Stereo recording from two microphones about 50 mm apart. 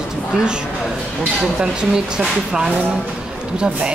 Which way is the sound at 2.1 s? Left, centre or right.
Centre.